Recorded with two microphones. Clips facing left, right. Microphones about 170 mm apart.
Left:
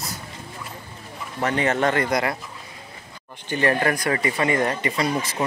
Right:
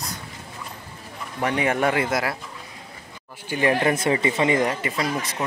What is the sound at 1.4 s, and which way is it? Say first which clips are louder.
Speech: even; 10° right (ahead or behind).